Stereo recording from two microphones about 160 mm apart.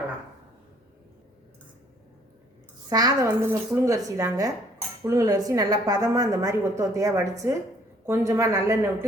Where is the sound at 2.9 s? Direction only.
20° right (ahead or behind).